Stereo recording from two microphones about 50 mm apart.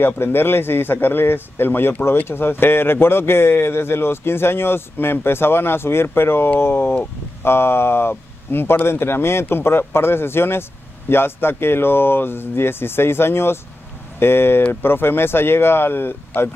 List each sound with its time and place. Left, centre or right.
0.0 s speech: left